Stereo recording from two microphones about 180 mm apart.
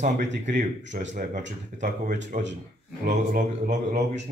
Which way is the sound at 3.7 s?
40° right (ahead or behind).